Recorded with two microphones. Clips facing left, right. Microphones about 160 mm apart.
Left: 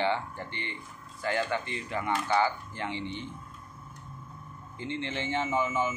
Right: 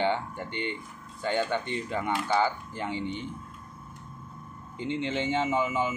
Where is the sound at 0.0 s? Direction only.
20° right (ahead or behind).